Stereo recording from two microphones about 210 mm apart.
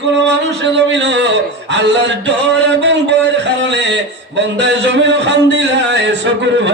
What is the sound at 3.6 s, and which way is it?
Music, 55° right (ahead or behind).